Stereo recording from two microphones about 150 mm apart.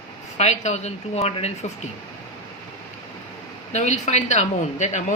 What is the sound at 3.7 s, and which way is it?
Speech, 50° left (ahead or behind).